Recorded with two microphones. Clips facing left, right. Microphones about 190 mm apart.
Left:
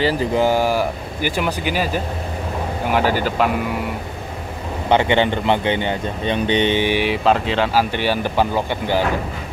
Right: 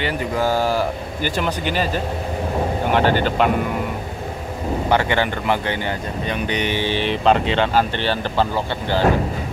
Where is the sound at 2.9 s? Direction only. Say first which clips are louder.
Even; 5° left (ahead or behind).